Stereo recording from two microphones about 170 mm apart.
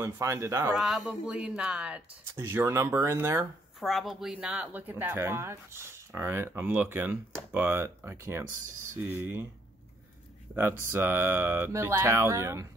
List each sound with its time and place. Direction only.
0.0 s speech: 20° right (ahead or behind)
0.7 s speech: centre (ahead or behind)
3.8 s speech: centre (ahead or behind)
10.9 s speech: 15° right (ahead or behind)